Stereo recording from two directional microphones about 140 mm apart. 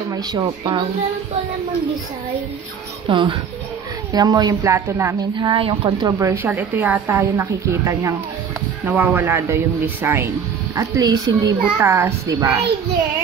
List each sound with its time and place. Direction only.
0.1 s speech: 30° right (ahead or behind)
3.1 s a woman's voice: 35° right (ahead or behind); by 5.1 s 20° right (ahead or behind)
5.4 s speech: 35° right (ahead or behind)
6.0 s a woman's voice: 20° right (ahead or behind)
10.8 s a woman's voice: 25° right (ahead or behind)